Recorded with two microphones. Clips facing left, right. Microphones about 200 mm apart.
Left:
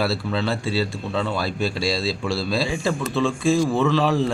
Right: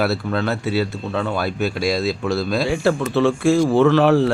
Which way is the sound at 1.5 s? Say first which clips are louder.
Right 3 dB; 30° left (ahead or behind).